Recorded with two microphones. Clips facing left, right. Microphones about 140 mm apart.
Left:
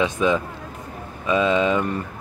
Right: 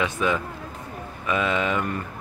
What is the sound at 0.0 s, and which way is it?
Speech, 20° left (ahead or behind).